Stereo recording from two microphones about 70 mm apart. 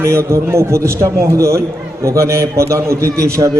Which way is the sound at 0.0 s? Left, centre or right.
Right.